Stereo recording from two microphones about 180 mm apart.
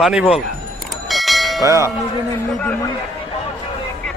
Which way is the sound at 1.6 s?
15° right (ahead or behind).